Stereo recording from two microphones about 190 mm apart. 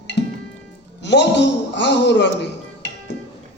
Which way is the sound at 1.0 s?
65° left (ahead or behind).